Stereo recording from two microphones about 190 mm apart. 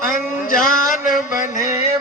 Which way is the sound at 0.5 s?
45° left (ahead or behind).